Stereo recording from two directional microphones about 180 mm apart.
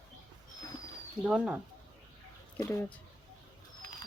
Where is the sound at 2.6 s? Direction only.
15° left (ahead or behind).